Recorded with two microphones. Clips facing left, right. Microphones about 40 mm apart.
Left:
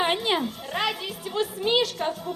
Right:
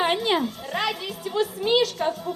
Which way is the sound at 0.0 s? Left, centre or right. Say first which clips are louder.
Right 2 dB; centre.